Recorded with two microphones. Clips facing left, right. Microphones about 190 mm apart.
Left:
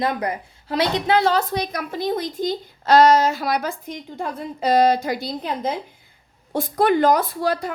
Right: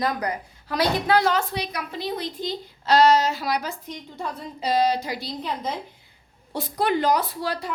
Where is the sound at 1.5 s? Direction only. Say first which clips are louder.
Left 5 dB; 45° left (ahead or behind).